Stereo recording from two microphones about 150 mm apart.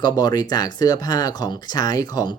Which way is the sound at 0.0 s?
25° left (ahead or behind).